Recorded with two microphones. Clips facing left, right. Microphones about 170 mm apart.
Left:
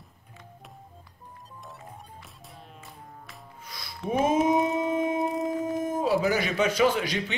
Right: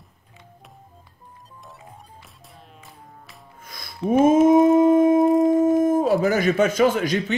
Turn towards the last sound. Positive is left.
turn(degrees=-45)  # may be behind; listen again after turning